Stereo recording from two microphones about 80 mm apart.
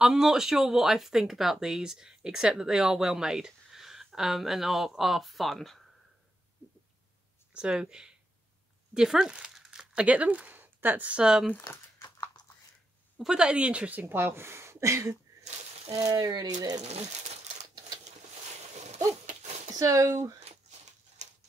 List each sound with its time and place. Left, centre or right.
0.0 s speech: centre
7.5 s speech: centre
12.0 s typing: left
13.2 s speech: centre; by 16.8 s right
17.7 s a sound: right
19.7 s speech: right